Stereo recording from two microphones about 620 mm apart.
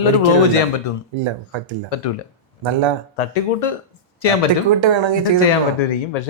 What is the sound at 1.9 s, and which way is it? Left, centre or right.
Speech, left.